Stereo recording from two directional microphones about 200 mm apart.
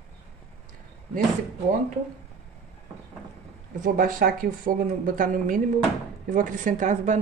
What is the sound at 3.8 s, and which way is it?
A woman's voice, 45° right (ahead or behind).